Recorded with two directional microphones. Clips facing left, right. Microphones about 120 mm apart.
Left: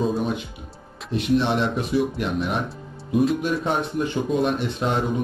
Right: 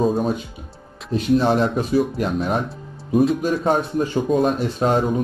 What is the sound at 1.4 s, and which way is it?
Speech, 40° right (ahead or behind).